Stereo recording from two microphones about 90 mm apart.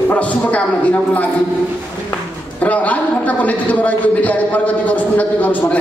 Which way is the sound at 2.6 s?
15° left (ahead or behind).